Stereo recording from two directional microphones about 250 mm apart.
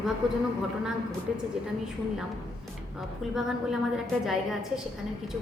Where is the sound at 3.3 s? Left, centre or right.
Centre.